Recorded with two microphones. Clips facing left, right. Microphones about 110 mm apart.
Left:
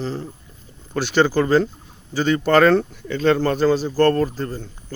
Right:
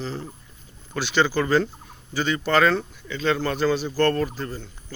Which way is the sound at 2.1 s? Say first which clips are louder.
Left 5 dB; 45° left (ahead or behind).